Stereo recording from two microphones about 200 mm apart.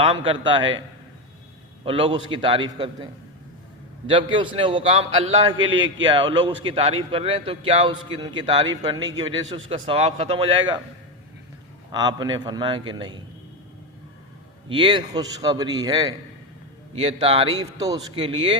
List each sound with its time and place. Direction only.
0.0 s a man's voice: 25° right (ahead or behind)
1.8 s a man's voice: 25° right (ahead or behind)
11.9 s a man's voice: 20° right (ahead or behind)
14.7 s a man's voice: 25° right (ahead or behind)
16.9 s a man's voice: 30° right (ahead or behind)